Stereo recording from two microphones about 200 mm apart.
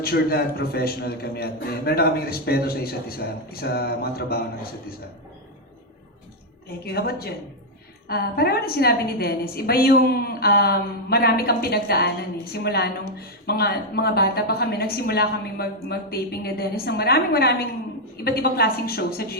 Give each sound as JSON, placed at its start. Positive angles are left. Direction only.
{"t": 0.0, "sound": "a man's voice", "side_deg": 50}
{"t": 6.8, "sound": "a man's voice", "side_deg": 50}